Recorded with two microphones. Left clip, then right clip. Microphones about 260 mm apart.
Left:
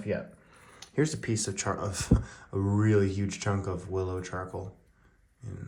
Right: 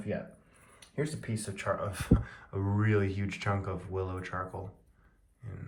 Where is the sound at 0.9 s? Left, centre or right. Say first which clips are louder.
Left 7 dB; left.